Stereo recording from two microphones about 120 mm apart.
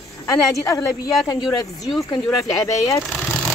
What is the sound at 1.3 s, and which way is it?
Speech, 30° left (ahead or behind).